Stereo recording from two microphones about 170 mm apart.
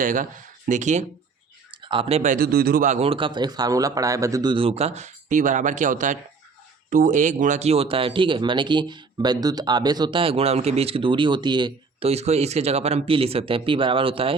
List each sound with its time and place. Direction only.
0.0 s speech: 50° right (ahead or behind)
1.7 s speech: 30° right (ahead or behind); by 2.8 s 65° right (ahead or behind)
2.8 s speech: 40° right (ahead or behind)